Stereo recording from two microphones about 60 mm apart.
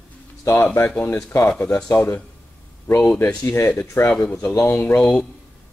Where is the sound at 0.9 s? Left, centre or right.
Left.